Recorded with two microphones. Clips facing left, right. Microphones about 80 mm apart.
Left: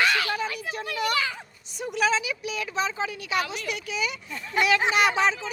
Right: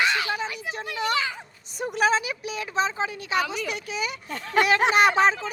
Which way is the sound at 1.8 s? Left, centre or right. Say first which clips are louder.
Right 2 dB; right.